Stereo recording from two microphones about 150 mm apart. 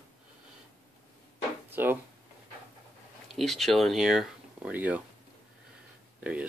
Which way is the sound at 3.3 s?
Centre (ahead or behind).